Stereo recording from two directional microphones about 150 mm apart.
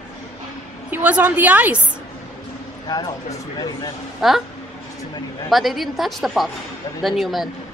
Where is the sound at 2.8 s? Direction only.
25° left (ahead or behind).